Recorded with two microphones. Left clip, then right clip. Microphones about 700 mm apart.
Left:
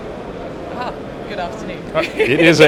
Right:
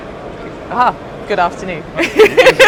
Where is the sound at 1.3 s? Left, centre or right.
Right.